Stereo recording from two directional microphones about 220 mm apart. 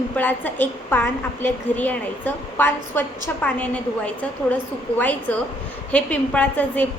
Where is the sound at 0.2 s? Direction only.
10° left (ahead or behind).